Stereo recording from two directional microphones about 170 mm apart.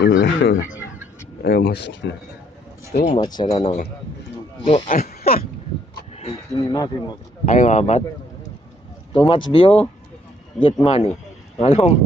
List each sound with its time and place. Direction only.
0.0 s speech: 90° left
1.4 s speech: 65° left (ahead or behind); by 2.1 s 90° left
3.0 s speech: 30° left (ahead or behind)
5.0 s speech: 60° left (ahead or behind)
6.1 s speech: 35° left (ahead or behind)
7.4 s speech: 45° left (ahead or behind)
9.1 s speech: 30° left (ahead or behind)